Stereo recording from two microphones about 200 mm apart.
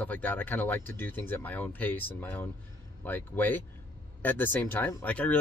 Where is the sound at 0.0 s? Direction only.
10° left (ahead or behind).